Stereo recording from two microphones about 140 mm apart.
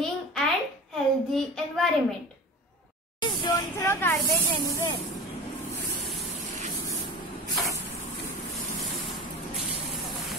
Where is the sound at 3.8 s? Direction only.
15° left (ahead or behind).